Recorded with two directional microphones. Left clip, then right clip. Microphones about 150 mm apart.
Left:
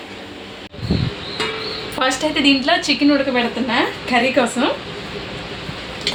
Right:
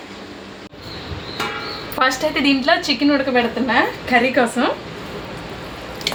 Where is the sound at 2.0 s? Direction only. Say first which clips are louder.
Right 1 dB; 5° right (ahead or behind).